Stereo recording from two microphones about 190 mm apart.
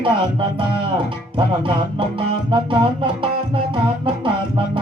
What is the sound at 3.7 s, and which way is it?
Music, 25° right (ahead or behind).